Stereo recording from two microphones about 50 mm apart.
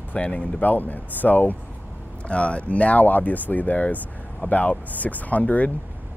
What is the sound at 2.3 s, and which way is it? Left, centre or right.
Speech, left.